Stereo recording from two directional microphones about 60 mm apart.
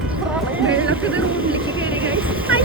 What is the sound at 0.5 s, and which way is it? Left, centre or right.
Vehicle, right.